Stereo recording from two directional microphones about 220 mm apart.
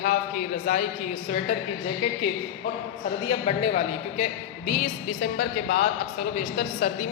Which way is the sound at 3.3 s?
25° left (ahead or behind).